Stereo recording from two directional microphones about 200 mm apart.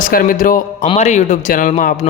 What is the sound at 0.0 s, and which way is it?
A man's voice, 45° left (ahead or behind).